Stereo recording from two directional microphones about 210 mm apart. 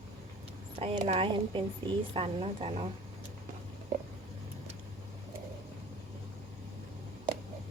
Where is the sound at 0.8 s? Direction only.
25° right (ahead or behind).